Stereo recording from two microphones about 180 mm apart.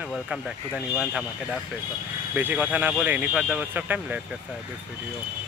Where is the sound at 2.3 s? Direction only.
10° right (ahead or behind).